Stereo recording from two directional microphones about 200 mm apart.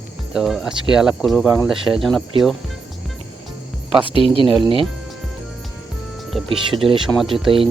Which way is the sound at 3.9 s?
25° right (ahead or behind).